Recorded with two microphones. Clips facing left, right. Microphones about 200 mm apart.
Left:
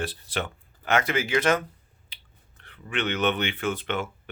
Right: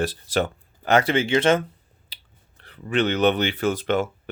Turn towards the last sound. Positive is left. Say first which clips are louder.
# right 6 dB
turn(degrees=-40)  # may be behind; listen again after turning